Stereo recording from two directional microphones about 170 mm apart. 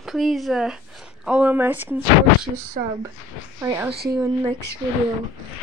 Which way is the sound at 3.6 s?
15° right (ahead or behind).